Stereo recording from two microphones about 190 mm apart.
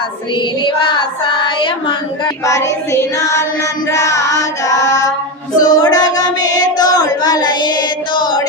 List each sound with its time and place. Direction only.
0.6 s child singing: 25° left (ahead or behind)
3.9 s music: 15° left (ahead or behind)
5.5 s child singing: 20° left (ahead or behind)